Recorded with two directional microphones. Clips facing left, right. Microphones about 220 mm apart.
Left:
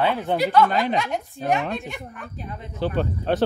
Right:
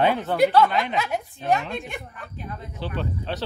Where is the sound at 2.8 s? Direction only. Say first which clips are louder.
Left 6 dB; 50° left (ahead or behind).